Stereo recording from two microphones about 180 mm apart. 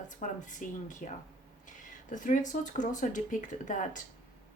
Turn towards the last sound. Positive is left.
turn(degrees=45)  # may be behind; listen again after turning